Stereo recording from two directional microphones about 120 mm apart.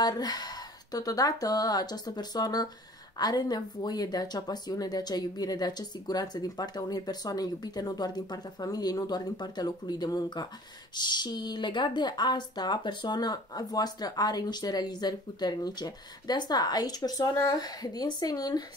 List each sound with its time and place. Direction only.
0.0 s speech: 35° left (ahead or behind)